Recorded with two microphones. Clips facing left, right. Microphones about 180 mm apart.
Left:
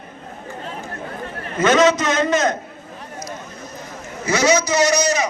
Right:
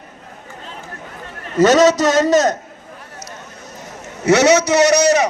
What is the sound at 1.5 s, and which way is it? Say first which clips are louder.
A man's voice: right 4 dB; 40° right (ahead or behind).